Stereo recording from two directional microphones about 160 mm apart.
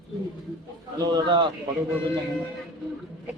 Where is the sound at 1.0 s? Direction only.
25° right (ahead or behind).